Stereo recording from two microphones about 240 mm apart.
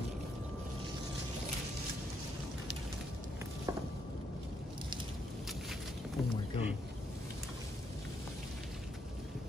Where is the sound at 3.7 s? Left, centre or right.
Centre.